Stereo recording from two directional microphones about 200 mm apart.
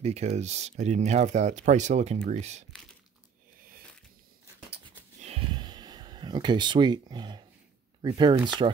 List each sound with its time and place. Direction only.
0.0 s speech: 30° right (ahead or behind)
5.2 s a sound: 25° right (ahead or behind)
8.0 s speech: 20° right (ahead or behind)